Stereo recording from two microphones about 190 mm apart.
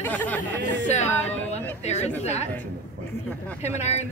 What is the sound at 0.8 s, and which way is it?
A woman's voice, 35° left (ahead or behind).